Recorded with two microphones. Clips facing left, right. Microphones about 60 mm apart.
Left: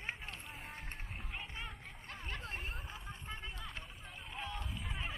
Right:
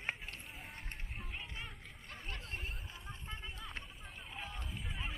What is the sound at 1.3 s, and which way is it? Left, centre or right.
Hubbub, left.